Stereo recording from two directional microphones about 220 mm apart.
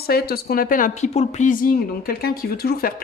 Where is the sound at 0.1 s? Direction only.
45° left (ahead or behind).